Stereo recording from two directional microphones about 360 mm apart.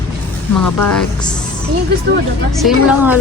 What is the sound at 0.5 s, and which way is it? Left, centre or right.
Speech, left.